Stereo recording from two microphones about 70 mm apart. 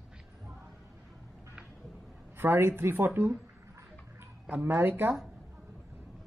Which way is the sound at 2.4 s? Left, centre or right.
Right.